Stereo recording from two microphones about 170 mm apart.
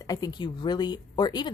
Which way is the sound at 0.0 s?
20° left (ahead or behind).